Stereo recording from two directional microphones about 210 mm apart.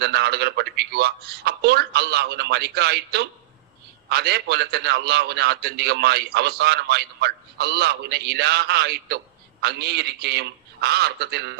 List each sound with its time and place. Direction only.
0.0 s a man's voice: 50° right (ahead or behind)